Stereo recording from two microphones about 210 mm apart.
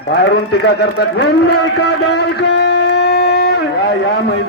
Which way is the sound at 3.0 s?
50° left (ahead or behind).